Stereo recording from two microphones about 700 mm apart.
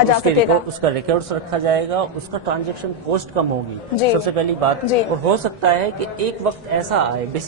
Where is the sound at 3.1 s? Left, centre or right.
Right.